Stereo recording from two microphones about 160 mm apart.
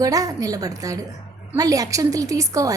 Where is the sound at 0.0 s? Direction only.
20° right (ahead or behind).